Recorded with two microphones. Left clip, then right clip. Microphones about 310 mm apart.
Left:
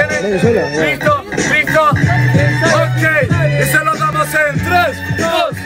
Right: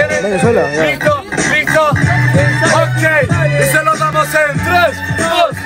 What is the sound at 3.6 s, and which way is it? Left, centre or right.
Speech, centre.